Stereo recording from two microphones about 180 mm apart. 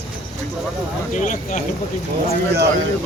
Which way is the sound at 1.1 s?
45° left (ahead or behind).